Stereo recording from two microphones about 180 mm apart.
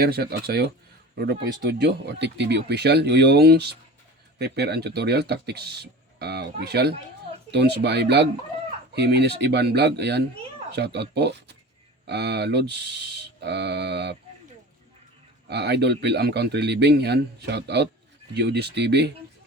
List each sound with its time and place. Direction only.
0.0 s speech: 60° right (ahead or behind)
15.4 s speech: 65° right (ahead or behind)